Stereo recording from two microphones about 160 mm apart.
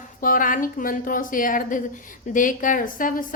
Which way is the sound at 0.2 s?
60° left (ahead or behind).